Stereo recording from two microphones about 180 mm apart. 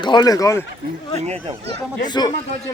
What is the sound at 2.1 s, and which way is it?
Speech, 25° left (ahead or behind).